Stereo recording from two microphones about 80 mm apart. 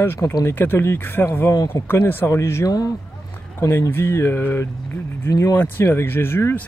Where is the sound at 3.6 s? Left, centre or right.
Left.